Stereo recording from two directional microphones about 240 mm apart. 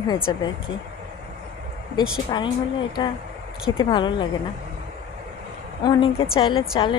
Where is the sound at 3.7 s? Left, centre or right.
Centre.